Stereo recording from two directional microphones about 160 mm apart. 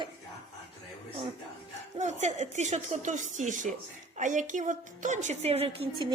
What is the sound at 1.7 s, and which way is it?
A woman's voice, 45° right (ahead or behind).